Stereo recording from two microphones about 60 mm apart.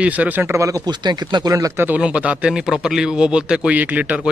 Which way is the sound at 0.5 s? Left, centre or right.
Right.